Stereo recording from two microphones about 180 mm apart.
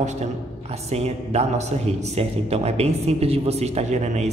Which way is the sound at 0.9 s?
35° right (ahead or behind).